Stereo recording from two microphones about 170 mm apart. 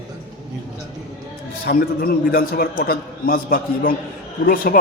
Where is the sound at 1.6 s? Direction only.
60° left (ahead or behind).